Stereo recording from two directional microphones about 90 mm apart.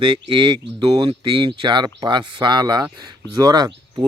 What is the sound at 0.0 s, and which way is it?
Speech, 65° right (ahead or behind).